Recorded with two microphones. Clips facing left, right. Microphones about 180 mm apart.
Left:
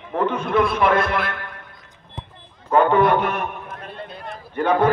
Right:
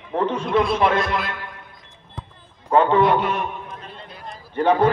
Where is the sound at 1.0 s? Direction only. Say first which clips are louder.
Left 2 dB; 60° left (ahead or behind).